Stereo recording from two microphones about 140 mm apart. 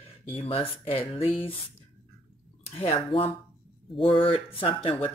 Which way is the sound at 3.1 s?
45° left (ahead or behind).